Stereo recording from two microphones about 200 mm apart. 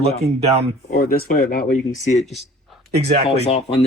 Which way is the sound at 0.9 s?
45° left (ahead or behind).